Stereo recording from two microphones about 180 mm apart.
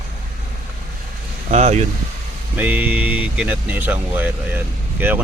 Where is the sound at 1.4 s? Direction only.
40° right (ahead or behind).